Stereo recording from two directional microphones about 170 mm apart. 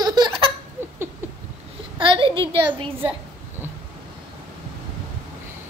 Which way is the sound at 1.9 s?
30° right (ahead or behind).